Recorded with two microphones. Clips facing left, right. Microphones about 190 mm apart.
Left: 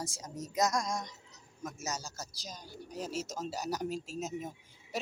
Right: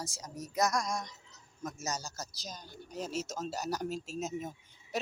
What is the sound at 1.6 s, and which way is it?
A man's voice, 5° left (ahead or behind).